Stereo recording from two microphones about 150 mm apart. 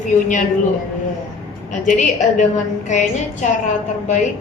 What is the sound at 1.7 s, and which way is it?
A woman's voice, 55° left (ahead or behind).